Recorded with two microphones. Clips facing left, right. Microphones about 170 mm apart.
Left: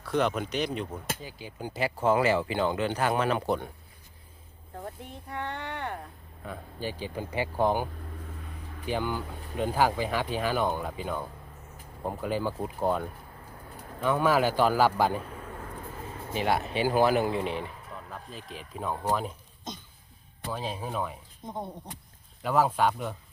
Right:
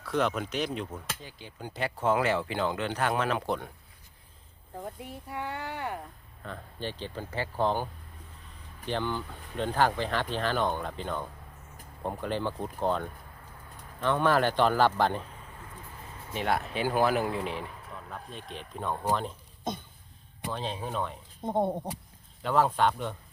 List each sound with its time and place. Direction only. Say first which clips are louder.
0.0 s speech: left 1 dB; centre (ahead or behind)
4.8 s speech: right 1 dB; 5° right (ahead or behind)
6.4 s speech: left 2 dB; 10° left (ahead or behind)
8.9 s speech: left 1 dB; 10° left (ahead or behind)
16.3 s speech: left 2 dB; centre (ahead or behind)
19.7 s speech: right 6 dB; 55° right (ahead or behind)
20.5 s speech: left 1 dB; 5° left (ahead or behind)
21.4 s speech: right 9 dB; 55° right (ahead or behind)
22.4 s speech: even; 5° left (ahead or behind)